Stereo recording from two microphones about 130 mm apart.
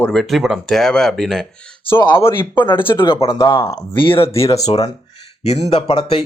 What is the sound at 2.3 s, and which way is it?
Speech, 15° left (ahead or behind).